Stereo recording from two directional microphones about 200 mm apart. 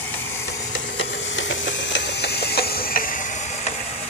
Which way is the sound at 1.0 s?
70° left (ahead or behind).